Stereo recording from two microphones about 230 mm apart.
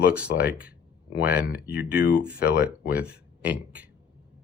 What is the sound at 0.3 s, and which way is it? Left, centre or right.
Speech, centre.